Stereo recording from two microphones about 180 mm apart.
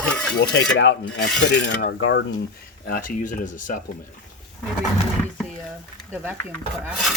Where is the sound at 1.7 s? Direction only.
70° left (ahead or behind).